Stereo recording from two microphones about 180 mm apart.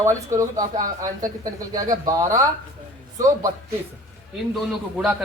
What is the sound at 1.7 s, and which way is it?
Speech, 20° right (ahead or behind).